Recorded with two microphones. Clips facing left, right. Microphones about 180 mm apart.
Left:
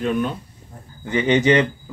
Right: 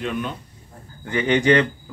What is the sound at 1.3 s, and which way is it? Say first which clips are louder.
Speech: left 1 dB; 10° left (ahead or behind).